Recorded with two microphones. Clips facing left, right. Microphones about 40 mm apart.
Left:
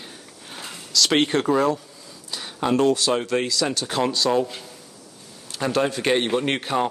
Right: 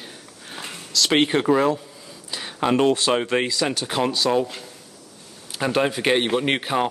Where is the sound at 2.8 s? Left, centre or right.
Right; by 4.4 s centre.